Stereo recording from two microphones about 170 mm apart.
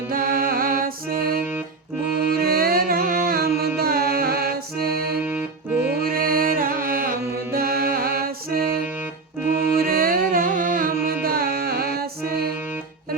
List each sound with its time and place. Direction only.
0.1 s music: 60° right (ahead or behind)